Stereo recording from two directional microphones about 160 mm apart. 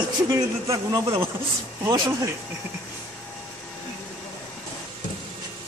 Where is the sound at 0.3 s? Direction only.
20° right (ahead or behind).